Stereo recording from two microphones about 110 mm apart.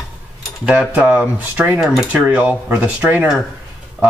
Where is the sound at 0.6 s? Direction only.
10° right (ahead or behind).